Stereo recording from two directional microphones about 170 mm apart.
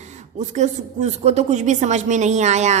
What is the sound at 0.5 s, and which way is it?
A woman's voice, 45° right (ahead or behind).